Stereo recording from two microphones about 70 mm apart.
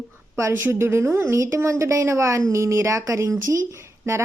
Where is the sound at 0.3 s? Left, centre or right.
Right.